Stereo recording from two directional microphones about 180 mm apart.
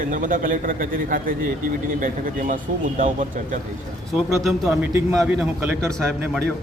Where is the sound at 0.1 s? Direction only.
45° right (ahead or behind).